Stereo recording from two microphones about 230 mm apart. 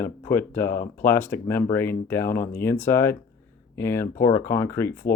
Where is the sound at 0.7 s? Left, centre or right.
Left.